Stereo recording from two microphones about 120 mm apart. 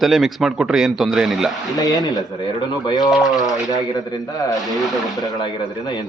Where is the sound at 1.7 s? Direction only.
30° left (ahead or behind).